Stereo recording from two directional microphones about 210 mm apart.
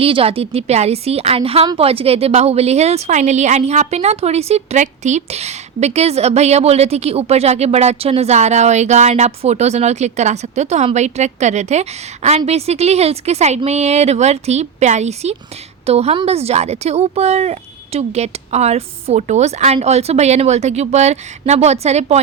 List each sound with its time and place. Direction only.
0.0 s a woman's voice: 25° right (ahead or behind)